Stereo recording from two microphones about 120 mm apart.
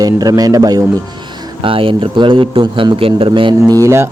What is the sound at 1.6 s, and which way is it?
A man's voice, 45° right (ahead or behind).